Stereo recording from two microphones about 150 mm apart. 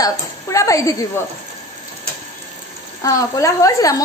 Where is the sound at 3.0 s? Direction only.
20° left (ahead or behind).